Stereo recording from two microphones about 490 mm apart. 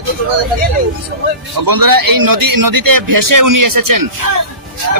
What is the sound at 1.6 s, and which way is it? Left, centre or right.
A man's voice, right.